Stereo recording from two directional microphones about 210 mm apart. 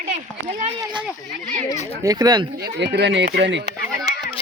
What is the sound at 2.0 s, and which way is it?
Speech, 20° right (ahead or behind).